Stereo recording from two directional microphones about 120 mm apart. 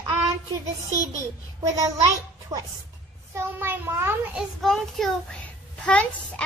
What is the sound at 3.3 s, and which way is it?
Speech, 20° right (ahead or behind).